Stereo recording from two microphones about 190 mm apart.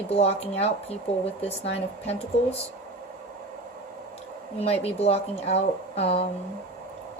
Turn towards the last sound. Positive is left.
turn(degrees=30)  # may be behind; listen again after turning